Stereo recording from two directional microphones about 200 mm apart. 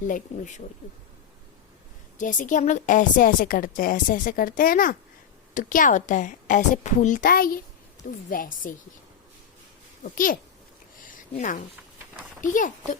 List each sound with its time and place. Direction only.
0.1 s a woman's voice: 35° left (ahead or behind)
2.1 s a woman's voice: 40° left (ahead or behind)
10.0 s a woman's voice: 45° left (ahead or behind)
11.0 s a sound: 40° left (ahead or behind)
12.4 s a woman's voice: 40° left (ahead or behind)